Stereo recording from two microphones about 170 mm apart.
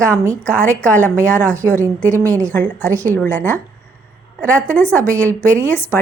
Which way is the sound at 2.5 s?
10° left (ahead or behind).